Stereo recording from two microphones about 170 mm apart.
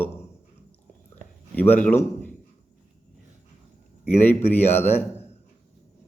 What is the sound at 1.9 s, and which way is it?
Speech, 10° left (ahead or behind).